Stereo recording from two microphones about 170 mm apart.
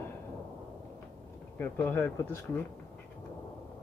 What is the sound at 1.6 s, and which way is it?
Speech, 10° left (ahead or behind).